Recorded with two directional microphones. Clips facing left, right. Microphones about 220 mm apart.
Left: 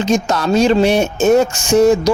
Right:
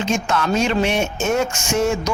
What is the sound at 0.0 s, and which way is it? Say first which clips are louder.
Speech: left 5 dB; 35° left (ahead or behind).